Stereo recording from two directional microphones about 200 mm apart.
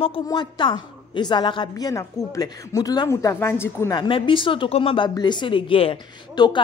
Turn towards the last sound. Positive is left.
turn(degrees=20)  # may be behind; listen again after turning